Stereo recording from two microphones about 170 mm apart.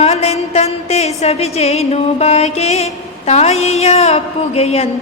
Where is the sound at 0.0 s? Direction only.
40° left (ahead or behind).